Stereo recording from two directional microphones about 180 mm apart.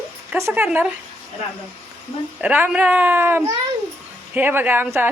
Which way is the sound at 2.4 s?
10° right (ahead or behind).